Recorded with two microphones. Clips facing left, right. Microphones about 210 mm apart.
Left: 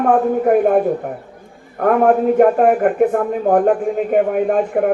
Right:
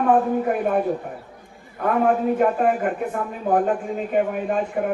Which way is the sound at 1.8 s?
55° left (ahead or behind).